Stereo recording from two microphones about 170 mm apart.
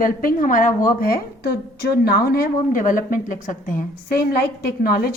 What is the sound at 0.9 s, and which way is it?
A woman's voice, 60° left (ahead or behind).